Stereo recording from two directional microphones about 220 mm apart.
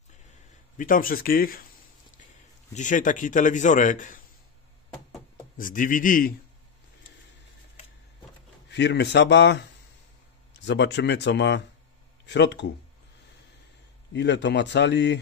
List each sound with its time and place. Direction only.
0.7 s a man's voice: 40° left (ahead or behind)
2.7 s a man's voice: 35° left (ahead or behind)
5.6 s a man's voice: 40° left (ahead or behind)
8.6 s speech: 50° left (ahead or behind)
14.1 s speech: 55° left (ahead or behind)